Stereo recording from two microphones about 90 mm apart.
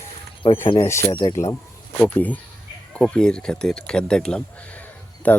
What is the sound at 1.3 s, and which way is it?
Speech, 35° left (ahead or behind).